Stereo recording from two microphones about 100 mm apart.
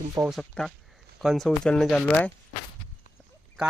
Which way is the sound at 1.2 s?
Centre (ahead or behind).